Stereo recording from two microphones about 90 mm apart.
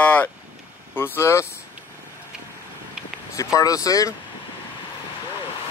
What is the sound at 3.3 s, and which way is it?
Vehicle, 40° left (ahead or behind).